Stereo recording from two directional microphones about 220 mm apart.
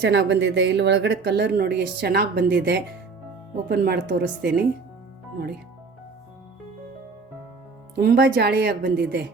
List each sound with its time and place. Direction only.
0.0 s speech: 50° right (ahead or behind)
7.9 s speech: 45° right (ahead or behind)